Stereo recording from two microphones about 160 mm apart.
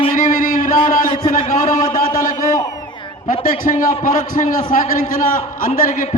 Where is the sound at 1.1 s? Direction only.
30° left (ahead or behind).